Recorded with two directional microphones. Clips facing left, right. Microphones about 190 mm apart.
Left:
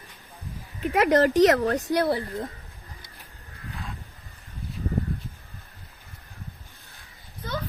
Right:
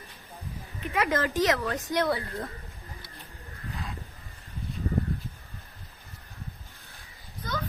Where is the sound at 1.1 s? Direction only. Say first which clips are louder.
Left 9 dB; 40° left (ahead or behind).